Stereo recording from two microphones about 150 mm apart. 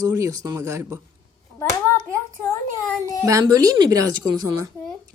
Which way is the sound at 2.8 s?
25° left (ahead or behind).